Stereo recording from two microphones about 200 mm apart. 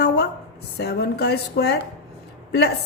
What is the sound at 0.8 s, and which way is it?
A woman's voice, 55° left (ahead or behind).